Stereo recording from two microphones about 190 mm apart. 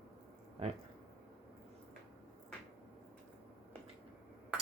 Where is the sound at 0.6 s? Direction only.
30° right (ahead or behind).